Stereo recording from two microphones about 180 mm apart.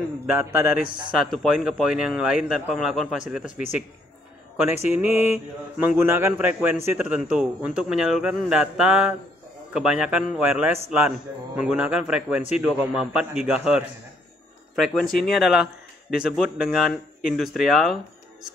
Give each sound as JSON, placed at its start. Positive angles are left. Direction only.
{"t": 0.3, "sound": "speech", "side_deg": -10}
{"t": 0.8, "sound": "speech", "side_deg": -25}
{"t": 1.1, "sound": "speech", "side_deg": 0}
{"t": 4.8, "sound": "speech", "side_deg": -10}